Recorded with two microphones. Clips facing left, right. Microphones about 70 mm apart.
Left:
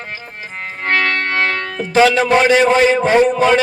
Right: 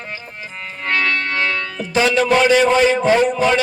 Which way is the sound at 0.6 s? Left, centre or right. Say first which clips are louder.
Left 3 dB; left.